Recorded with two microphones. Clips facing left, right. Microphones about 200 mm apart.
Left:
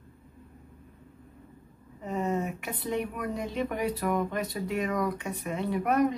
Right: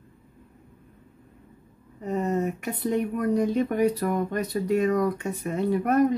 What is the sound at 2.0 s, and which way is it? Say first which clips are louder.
Speech: right 4 dB; 40° right (ahead or behind).